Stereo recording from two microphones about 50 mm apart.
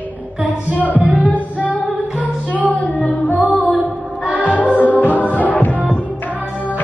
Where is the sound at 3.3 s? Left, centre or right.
Left.